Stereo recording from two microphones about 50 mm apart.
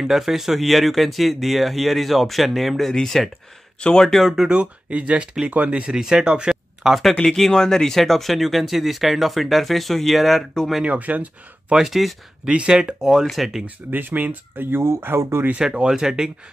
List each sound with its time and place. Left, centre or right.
0.0 s speech: centre
4.5 s speech: right
5.9 s speech: centre
7.2 s speech: centre
10.9 s speech: right
11.7 s speech: centre
12.4 s speech: right; by 13.7 s centre
13.7 s speech: right
15.5 s speech: right